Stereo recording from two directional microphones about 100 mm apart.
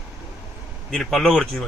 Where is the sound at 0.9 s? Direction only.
Centre (ahead or behind).